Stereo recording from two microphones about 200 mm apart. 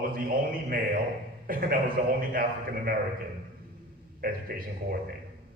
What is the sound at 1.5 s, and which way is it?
Speech, 45° right (ahead or behind).